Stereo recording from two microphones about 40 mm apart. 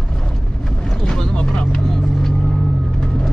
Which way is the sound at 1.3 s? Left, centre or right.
Left.